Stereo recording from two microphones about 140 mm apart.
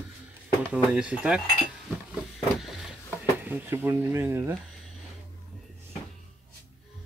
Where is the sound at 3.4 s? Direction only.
15° right (ahead or behind).